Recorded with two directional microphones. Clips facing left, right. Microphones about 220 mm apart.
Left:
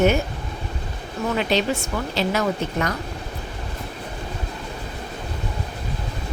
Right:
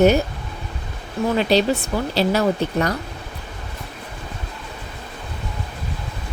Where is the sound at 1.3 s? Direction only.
35° right (ahead or behind).